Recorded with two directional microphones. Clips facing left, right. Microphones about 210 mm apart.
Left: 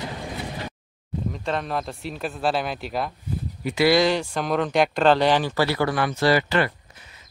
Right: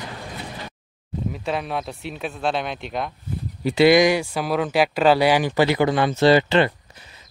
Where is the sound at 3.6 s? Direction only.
30° right (ahead or behind).